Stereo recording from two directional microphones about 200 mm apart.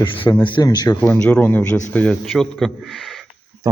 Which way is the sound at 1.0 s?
5° left (ahead or behind).